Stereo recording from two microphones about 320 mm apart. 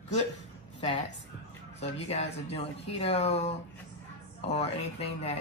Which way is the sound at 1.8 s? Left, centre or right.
Centre.